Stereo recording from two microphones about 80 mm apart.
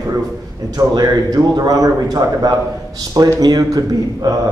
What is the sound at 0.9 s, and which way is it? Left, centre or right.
A man's voice, right.